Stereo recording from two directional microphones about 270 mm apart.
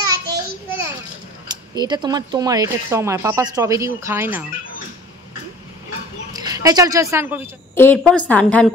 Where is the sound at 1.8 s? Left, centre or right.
Centre.